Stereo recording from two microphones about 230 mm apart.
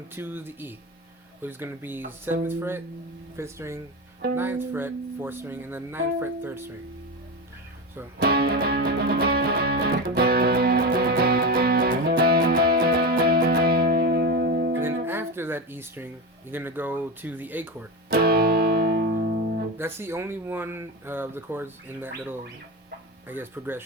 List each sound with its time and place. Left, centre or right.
0.2 s speech: centre
8.2 s music: right
14.8 s guitar: centre
16.5 s speech: centre
18.1 s music: right
19.8 s speech: centre